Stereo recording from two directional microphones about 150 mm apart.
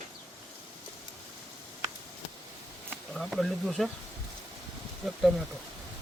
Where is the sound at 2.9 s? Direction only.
Centre (ahead or behind).